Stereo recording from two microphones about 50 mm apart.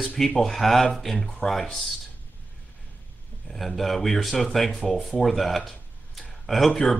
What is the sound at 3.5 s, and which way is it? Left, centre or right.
Speech, centre.